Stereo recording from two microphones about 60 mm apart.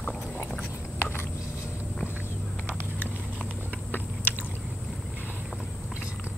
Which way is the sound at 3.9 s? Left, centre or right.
Left.